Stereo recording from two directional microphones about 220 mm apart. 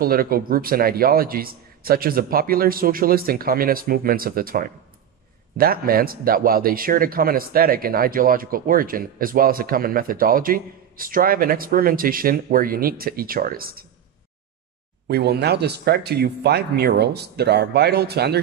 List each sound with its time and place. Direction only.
0.0 s speech: 40° right (ahead or behind)
15.0 s speech: 45° right (ahead or behind)